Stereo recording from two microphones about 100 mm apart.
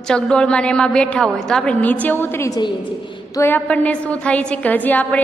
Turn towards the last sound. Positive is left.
turn(degrees=15)  # may be behind; listen again after turning